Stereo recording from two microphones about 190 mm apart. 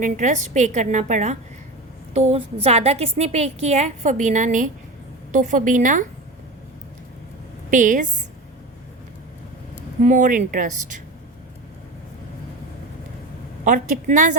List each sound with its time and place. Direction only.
0.0 s a woman's voice: 40° right (ahead or behind)
7.7 s speech: 45° right (ahead or behind)
10.0 s speech: 40° right (ahead or behind)
13.7 s speech: 45° right (ahead or behind)